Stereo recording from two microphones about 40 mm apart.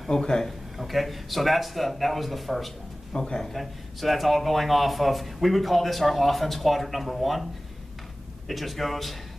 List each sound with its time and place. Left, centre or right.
0.1 s a man's voice: centre
0.5 s speech: centre
3.1 s a man's voice: centre
3.5 s speech: centre
8.5 s speech: centre